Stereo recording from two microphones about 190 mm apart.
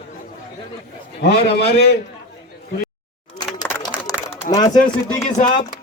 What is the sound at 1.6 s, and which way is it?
Speech, 55° left (ahead or behind).